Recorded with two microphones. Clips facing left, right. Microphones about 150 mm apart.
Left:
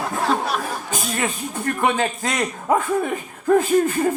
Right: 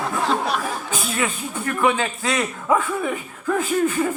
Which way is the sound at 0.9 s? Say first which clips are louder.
Left 1 dB; 40° left (ahead or behind).